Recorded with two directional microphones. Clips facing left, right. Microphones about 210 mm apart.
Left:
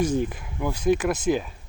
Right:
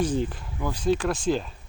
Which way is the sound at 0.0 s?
10° left (ahead or behind).